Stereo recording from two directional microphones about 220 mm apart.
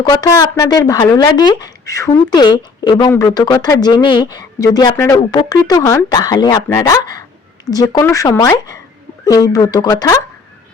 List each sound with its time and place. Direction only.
0.0 s speech: 20° left (ahead or behind)